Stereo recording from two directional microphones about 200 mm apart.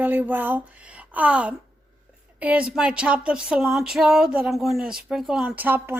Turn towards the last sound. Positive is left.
turn(degrees=-10)  # may be behind; listen again after turning